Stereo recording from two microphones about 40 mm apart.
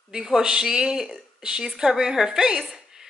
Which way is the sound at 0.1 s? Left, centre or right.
Centre.